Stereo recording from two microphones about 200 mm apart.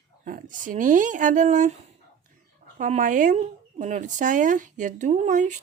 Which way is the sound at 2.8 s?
40° right (ahead or behind).